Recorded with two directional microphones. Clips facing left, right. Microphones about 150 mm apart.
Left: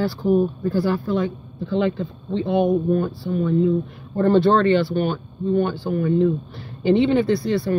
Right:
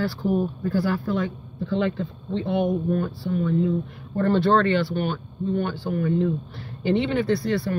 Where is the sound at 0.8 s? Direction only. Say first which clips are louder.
Left 3 dB; 25° left (ahead or behind).